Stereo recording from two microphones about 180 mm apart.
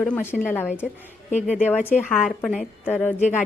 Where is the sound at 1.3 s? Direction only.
40° left (ahead or behind).